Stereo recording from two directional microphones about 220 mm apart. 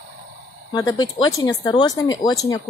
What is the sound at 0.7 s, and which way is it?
Speech, 20° left (ahead or behind).